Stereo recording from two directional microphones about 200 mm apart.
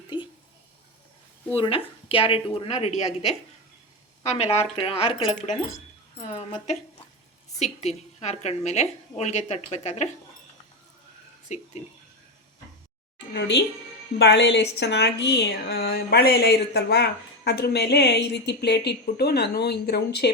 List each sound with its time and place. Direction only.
1.5 s a woman's voice: 25° left (ahead or behind)
4.2 s a woman's voice: 30° left (ahead or behind)
7.6 s a woman's voice: 35° left (ahead or behind)
11.4 s speech: 35° left (ahead or behind)
13.3 s speech: 60° left (ahead or behind)